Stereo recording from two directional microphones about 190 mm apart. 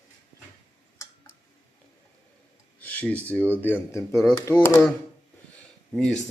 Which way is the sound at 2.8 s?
5° left (ahead or behind).